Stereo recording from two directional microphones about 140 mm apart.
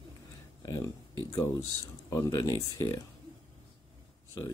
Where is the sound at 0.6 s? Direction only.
25° left (ahead or behind).